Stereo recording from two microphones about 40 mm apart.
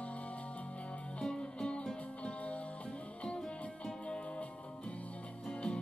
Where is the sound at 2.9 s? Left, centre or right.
Centre.